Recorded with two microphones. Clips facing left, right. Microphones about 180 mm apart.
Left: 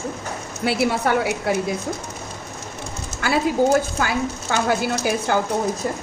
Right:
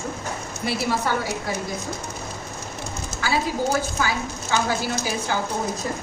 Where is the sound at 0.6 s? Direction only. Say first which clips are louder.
Left 4 dB; 65° left (ahead or behind).